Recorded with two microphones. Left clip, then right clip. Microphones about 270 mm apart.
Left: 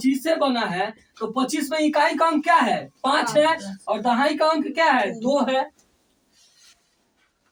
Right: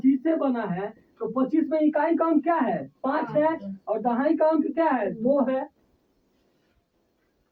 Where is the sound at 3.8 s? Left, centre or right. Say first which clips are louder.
Left 3 dB; right.